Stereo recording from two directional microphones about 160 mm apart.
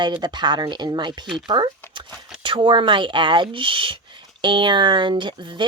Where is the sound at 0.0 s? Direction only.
30° right (ahead or behind).